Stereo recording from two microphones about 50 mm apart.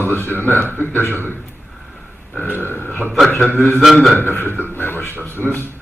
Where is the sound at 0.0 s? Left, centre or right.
Left.